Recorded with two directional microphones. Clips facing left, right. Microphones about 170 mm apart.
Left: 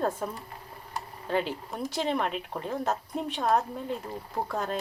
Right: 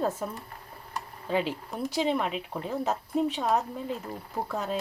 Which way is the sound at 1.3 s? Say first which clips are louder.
Right 1 dB; 5° right (ahead or behind).